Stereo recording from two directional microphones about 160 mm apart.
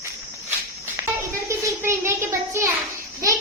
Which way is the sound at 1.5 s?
15° right (ahead or behind).